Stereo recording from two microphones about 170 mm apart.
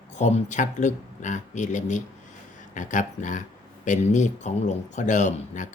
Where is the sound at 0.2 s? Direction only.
45° left (ahead or behind).